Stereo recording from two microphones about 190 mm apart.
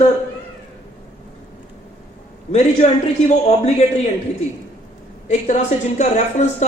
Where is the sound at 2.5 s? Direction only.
35° left (ahead or behind).